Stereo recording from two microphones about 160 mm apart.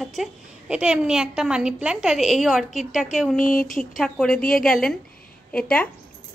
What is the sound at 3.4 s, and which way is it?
Speech, 55° left (ahead or behind).